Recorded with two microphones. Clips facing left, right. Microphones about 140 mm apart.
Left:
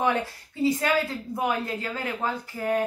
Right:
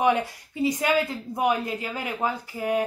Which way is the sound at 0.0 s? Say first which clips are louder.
Right 3 dB; 15° right (ahead or behind).